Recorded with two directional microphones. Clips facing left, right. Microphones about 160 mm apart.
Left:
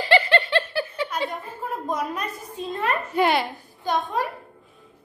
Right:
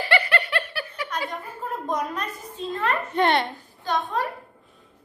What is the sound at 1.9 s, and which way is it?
A woman's voice, 5° left (ahead or behind).